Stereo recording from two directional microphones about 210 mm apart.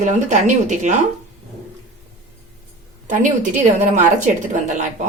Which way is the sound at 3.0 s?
40° right (ahead or behind).